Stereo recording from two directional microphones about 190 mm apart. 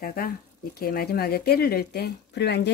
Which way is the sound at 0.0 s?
50° left (ahead or behind).